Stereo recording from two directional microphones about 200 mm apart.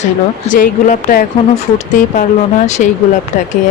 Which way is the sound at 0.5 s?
40° left (ahead or behind).